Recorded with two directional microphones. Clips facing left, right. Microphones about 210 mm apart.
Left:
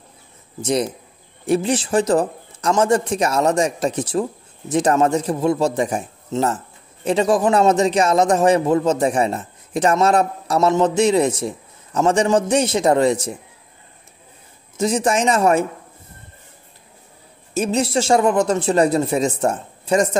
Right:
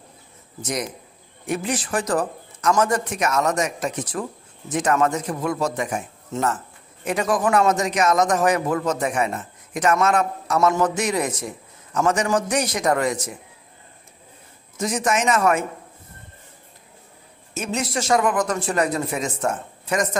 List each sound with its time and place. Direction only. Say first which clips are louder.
1.4 s a man's voice: left 7 dB; 30° left (ahead or behind)
14.8 s speech: left 4 dB; 30° left (ahead or behind)
17.6 s a man's voice: left 7 dB; 30° left (ahead or behind)